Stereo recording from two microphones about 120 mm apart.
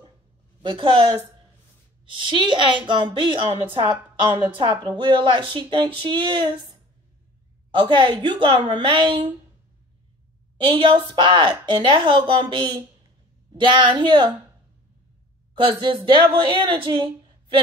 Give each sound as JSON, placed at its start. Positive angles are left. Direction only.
{"t": 0.6, "sound": "a woman's voice", "side_deg": -45}
{"t": 7.7, "sound": "a woman's voice", "side_deg": -40}
{"t": 10.6, "sound": "a woman's voice", "side_deg": -45}
{"t": 15.5, "sound": "a woman's voice", "side_deg": -40}